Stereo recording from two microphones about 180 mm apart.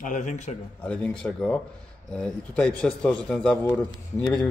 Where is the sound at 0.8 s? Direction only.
5° left (ahead or behind).